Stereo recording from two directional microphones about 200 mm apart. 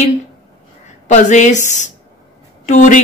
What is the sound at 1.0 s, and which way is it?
Speech, 35° left (ahead or behind).